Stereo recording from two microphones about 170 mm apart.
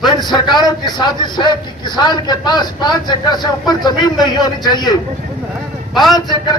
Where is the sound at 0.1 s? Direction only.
25° left (ahead or behind).